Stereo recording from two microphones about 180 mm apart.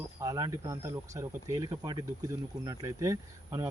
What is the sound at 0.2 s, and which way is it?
Speech, 20° right (ahead or behind).